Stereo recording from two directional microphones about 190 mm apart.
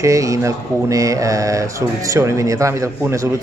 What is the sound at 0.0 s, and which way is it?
A man's voice, 15° right (ahead or behind).